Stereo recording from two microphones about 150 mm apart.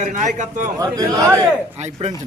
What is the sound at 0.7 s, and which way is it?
Speech, 25° right (ahead or behind).